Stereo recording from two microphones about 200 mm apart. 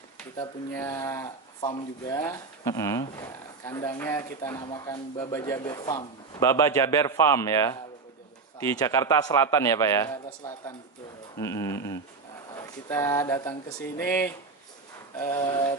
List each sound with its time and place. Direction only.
0.7 s speech: 15° left (ahead or behind)
11.3 s a sound: 15° left (ahead or behind)
12.5 s speech: 15° left (ahead or behind)
15.1 s speech: 20° left (ahead or behind)